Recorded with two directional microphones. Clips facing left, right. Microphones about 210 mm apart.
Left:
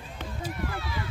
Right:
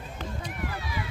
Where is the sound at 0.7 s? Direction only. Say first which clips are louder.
Even; 15° right (ahead or behind).